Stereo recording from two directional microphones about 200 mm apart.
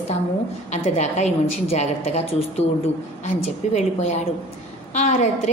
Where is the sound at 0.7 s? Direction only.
35° left (ahead or behind).